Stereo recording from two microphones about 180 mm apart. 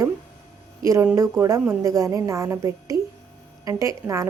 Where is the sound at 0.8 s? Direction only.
15° right (ahead or behind).